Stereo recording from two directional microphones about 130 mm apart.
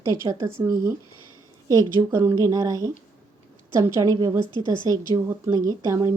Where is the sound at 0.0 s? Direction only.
25° right (ahead or behind).